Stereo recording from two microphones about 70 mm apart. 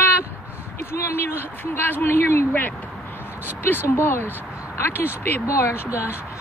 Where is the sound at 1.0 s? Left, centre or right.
Left.